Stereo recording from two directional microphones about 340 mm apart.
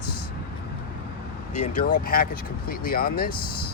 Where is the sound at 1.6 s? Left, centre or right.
Left.